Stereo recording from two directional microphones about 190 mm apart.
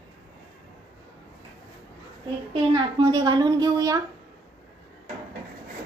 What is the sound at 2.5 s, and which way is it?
A woman's voice, 25° right (ahead or behind).